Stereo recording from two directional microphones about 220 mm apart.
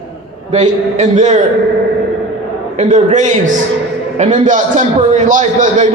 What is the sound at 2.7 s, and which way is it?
A man's voice, 35° right (ahead or behind).